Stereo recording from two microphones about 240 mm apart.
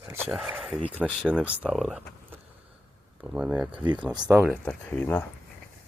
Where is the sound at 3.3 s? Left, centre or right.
Centre.